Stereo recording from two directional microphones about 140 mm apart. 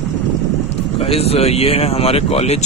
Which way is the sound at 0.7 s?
45° left (ahead or behind).